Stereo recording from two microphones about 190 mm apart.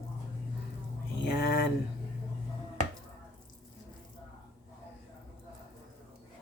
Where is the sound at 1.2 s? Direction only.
60° left (ahead or behind).